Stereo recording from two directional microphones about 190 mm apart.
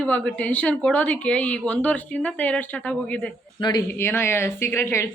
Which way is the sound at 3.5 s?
25° left (ahead or behind).